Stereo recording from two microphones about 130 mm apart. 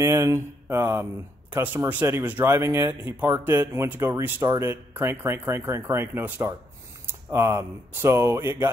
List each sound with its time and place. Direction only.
0.0 s speech: 20° right (ahead or behind)